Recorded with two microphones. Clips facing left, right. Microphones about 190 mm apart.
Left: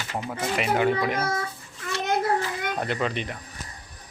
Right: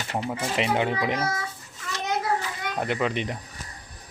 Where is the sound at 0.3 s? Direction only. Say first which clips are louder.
Left 1 dB; 20° right (ahead or behind).